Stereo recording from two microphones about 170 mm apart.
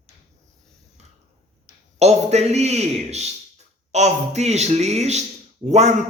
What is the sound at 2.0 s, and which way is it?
A man's voice, 40° right (ahead or behind).